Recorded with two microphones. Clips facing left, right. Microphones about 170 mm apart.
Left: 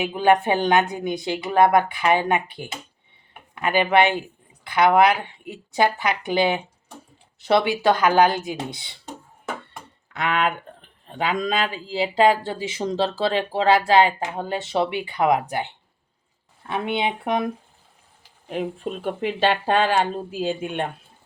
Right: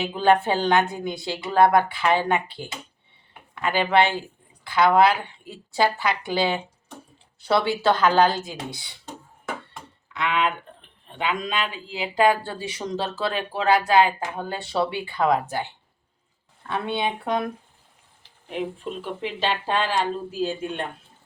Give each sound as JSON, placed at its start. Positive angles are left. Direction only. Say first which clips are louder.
{"t": 0.0, "sound": "a woman's voice", "louder": "left 1 dB", "side_deg": 15}
{"t": 10.1, "sound": "speech", "louder": "left 1 dB", "side_deg": 45}
{"t": 19.0, "sound": "speech", "louder": "left 6 dB", "side_deg": 55}